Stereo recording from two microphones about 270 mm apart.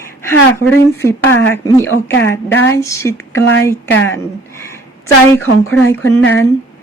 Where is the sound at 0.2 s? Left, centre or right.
Centre.